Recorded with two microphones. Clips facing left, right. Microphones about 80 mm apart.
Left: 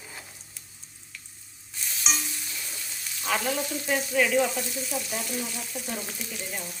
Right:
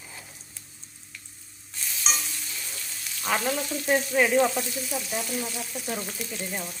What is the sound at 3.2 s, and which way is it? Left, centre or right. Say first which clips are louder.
Frying: right 1 dB; centre.